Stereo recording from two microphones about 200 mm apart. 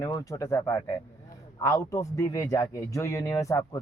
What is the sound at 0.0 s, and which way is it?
Speech, 15° left (ahead or behind).